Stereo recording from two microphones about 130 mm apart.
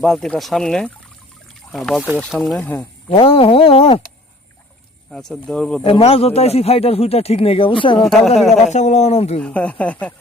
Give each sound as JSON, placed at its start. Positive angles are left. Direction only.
{"t": 0.0, "sound": "speech", "side_deg": 5}
{"t": 2.0, "sound": "speech", "side_deg": -10}
{"t": 2.6, "sound": "speech", "side_deg": 15}
{"t": 3.1, "sound": "speech", "side_deg": 50}
{"t": 5.1, "sound": "speech", "side_deg": 5}
{"t": 5.8, "sound": "speech", "side_deg": 50}
{"t": 8.0, "sound": "speech", "side_deg": 5}
{"t": 8.6, "sound": "speech", "side_deg": 60}
{"t": 9.4, "sound": "speech", "side_deg": 10}